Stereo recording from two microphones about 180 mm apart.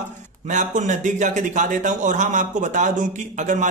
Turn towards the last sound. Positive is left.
turn(degrees=-45)  # may be behind; listen again after turning